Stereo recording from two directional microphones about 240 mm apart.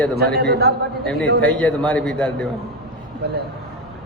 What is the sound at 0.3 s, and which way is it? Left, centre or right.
Speech, right.